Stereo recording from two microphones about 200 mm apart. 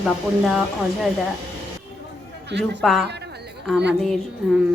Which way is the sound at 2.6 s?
Centre (ahead or behind).